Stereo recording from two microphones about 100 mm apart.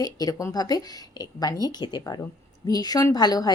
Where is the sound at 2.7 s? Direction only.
40° left (ahead or behind).